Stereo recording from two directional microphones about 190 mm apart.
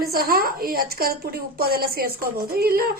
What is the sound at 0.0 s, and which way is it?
A woman's voice, 50° right (ahead or behind).